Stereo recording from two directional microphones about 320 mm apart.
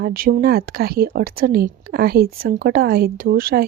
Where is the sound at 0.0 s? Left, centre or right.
Right.